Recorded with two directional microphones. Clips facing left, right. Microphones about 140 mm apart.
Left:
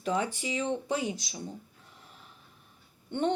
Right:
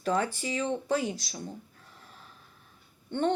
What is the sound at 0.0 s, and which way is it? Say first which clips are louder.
Speech: right 2 dB; 15° left (ahead or behind).